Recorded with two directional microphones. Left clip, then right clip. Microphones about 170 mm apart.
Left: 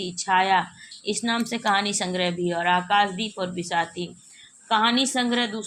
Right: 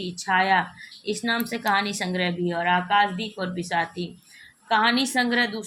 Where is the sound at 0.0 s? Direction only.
15° left (ahead or behind).